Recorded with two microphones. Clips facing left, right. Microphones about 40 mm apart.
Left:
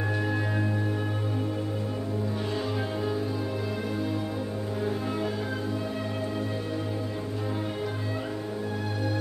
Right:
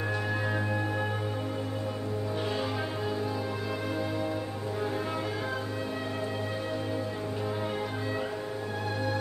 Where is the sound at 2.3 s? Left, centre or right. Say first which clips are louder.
Left 1 dB; centre.